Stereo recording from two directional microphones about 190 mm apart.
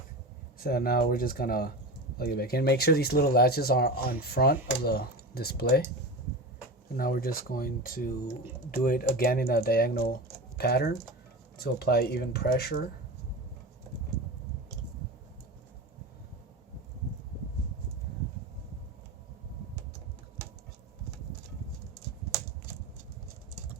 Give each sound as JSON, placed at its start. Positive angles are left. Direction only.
{"t": 0.6, "sound": "speech", "side_deg": 50}
{"t": 6.9, "sound": "speech", "side_deg": 50}